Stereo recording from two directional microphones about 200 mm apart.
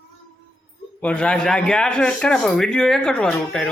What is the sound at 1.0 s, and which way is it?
A man's voice, 5° left (ahead or behind).